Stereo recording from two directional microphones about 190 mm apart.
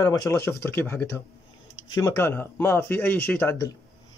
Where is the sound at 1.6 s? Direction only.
90° left.